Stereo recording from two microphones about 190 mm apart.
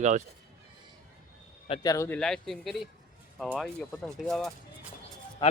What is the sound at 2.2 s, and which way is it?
Speech, centre (ahead or behind).